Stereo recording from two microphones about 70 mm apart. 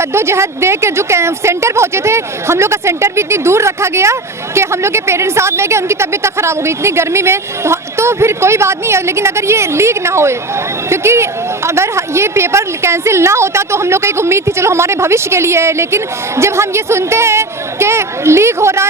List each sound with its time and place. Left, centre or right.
0.0 s a woman's voice: right